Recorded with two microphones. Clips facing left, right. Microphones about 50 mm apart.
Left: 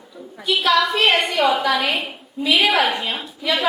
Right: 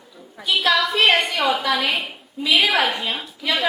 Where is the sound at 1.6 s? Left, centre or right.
Centre.